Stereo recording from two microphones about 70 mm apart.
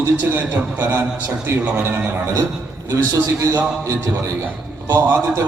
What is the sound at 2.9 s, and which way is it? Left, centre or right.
Speech, right.